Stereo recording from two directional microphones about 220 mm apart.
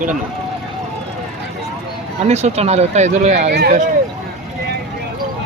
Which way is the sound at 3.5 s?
45° right (ahead or behind).